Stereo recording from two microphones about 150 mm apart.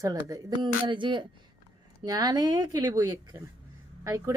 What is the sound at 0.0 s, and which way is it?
A woman's voice, 25° right (ahead or behind).